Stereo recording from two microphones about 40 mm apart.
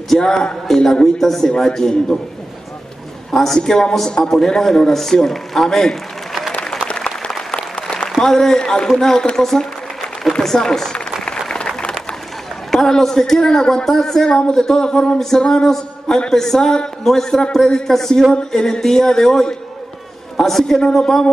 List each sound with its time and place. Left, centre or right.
0.1 s a man's voice: centre
3.3 s a man's voice: centre
6.6 s applause: centre
7.5 s applause: left
8.2 s a man's voice: centre
12.7 s a man's voice: centre
13.8 s a man's voice: centre
15.1 s a man's voice: centre
21.0 s a man's voice: centre